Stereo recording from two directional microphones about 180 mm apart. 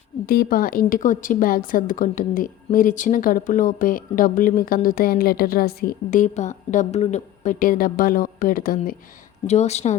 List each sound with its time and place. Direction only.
0.3 s a woman's voice: 55° left (ahead or behind)
9.5 s speech: 35° left (ahead or behind)